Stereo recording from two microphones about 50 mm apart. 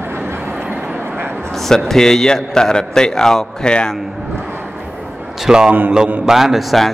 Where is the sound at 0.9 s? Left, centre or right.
Right.